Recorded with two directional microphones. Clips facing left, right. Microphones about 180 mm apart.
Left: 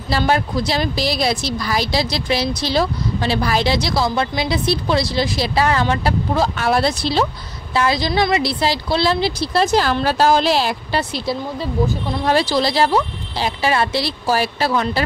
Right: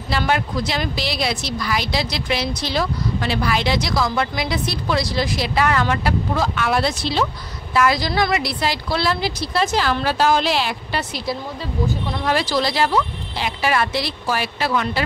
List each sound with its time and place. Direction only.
0.1 s a woman's voice: 35° left (ahead or behind)